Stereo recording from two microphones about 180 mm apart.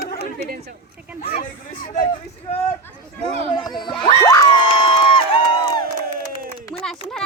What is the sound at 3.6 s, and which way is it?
Speech, 25° left (ahead or behind).